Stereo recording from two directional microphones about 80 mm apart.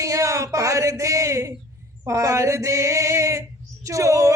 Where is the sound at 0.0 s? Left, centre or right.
Right.